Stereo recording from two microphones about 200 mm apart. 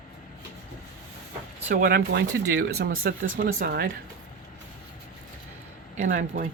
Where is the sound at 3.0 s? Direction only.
50° right (ahead or behind).